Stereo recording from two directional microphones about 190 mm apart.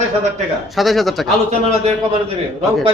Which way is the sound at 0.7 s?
Centre (ahead or behind).